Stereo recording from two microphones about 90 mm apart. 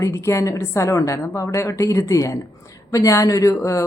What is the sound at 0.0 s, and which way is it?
Speech, 35° left (ahead or behind).